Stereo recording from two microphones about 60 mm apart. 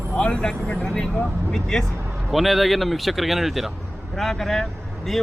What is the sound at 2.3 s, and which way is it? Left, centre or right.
Speech, centre.